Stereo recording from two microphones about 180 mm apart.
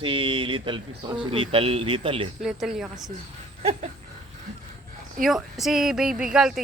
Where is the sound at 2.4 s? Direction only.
Centre (ahead or behind).